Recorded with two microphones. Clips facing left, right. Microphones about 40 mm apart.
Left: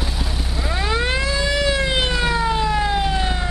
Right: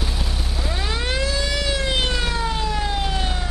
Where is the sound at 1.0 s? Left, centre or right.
Centre.